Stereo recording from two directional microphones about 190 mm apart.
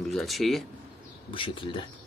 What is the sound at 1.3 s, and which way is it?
Speech, 25° left (ahead or behind).